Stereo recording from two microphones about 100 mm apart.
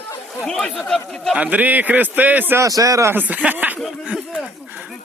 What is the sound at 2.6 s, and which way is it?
Speech, 35° right (ahead or behind).